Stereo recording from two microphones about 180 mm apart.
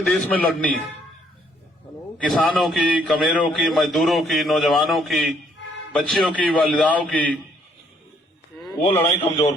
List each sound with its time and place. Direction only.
0.0 s a man's voice: 5° left (ahead or behind)
2.1 s a man's voice: centre (ahead or behind)
8.7 s a man's voice: 30° left (ahead or behind)